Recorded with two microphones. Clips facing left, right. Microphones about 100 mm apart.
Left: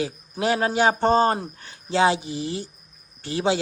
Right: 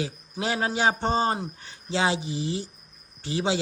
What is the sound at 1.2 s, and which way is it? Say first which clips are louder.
Speech: left 4 dB; 20° right (ahead or behind).